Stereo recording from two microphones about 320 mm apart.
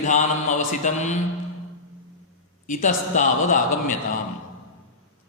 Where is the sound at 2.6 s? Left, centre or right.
Left.